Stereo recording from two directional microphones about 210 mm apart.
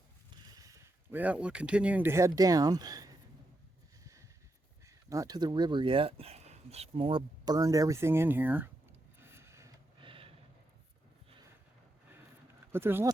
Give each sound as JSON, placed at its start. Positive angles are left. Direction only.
{"t": 0.5, "sound": "speech", "side_deg": -15}
{"t": 4.9, "sound": "speech", "side_deg": -15}
{"t": 9.2, "sound": "a sound", "side_deg": -10}
{"t": 12.7, "sound": "speech", "side_deg": -10}